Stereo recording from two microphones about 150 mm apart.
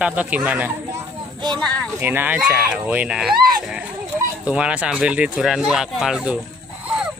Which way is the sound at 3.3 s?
80° right.